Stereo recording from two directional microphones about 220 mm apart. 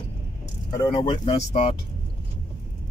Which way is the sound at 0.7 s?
20° left (ahead or behind).